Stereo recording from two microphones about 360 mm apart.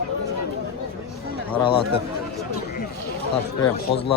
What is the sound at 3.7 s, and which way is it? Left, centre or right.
Speech, centre.